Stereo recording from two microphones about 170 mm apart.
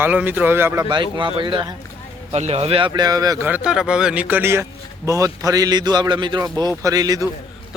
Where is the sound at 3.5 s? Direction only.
5° right (ahead or behind); by 7.3 s 20° right (ahead or behind).